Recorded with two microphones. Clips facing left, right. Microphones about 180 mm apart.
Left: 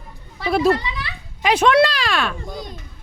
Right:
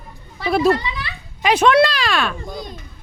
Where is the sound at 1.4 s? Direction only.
65° right (ahead or behind).